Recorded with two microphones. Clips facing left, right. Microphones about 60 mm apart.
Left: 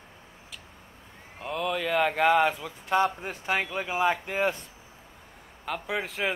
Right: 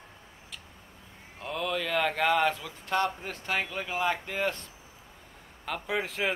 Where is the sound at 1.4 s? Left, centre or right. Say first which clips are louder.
Left 2 dB; centre.